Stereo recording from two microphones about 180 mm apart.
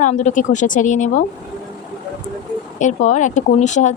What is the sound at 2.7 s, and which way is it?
A woman's voice, 40° left (ahead or behind).